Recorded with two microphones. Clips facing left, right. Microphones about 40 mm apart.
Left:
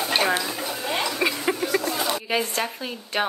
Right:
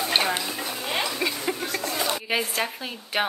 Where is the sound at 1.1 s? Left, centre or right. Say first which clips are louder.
Left 3 dB; left.